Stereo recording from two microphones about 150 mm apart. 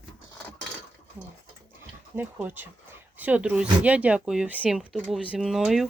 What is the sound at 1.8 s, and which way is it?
Speech, 10° right (ahead or behind).